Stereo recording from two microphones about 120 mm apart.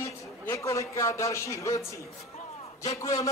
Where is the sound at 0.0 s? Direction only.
25° left (ahead or behind).